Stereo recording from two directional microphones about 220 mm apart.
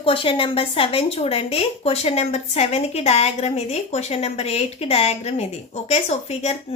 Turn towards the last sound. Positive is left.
turn(degrees=30)  # may be behind; listen again after turning